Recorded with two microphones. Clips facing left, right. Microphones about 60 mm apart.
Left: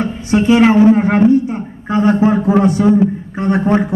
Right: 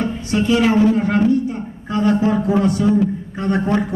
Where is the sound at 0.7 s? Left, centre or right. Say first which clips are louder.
Left 5 dB; left.